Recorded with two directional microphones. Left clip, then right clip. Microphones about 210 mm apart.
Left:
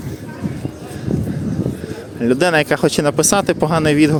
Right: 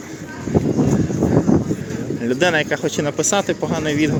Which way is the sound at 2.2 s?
30° left (ahead or behind).